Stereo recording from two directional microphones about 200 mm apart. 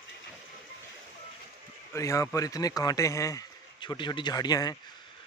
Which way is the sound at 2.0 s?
15° left (ahead or behind).